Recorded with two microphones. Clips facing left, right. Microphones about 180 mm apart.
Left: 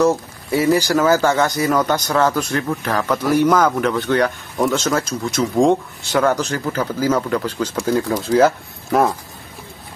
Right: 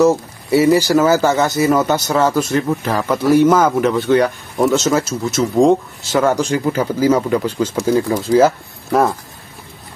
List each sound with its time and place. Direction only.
0.0 s speech: 10° right (ahead or behind)